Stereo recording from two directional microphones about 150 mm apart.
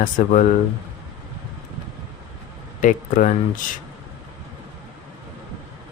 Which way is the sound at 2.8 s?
60° left (ahead or behind).